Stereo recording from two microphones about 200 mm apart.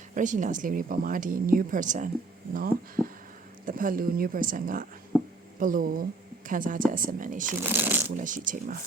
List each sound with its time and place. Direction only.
0.1 s a woman's voice: 40° right (ahead or behind)
7.6 s speech: 10° right (ahead or behind)
8.1 s a woman's voice: 40° right (ahead or behind)